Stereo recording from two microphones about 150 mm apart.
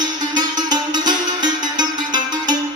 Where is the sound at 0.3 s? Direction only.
30° right (ahead or behind).